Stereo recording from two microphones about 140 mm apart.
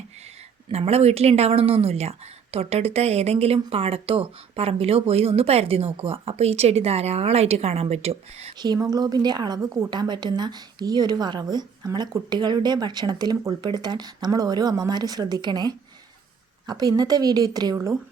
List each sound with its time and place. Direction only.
0.7 s speech: 45° right (ahead or behind)
8.5 s a woman's voice: 30° right (ahead or behind)